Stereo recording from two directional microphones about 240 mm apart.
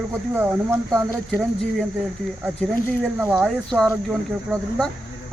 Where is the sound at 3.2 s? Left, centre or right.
Centre.